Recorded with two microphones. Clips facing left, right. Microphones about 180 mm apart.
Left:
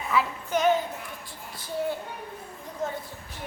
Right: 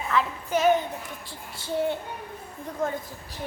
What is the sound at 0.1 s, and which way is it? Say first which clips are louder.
Speech: even; centre (ahead or behind).